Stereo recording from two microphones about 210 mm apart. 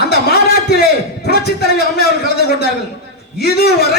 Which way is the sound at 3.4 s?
50° left (ahead or behind).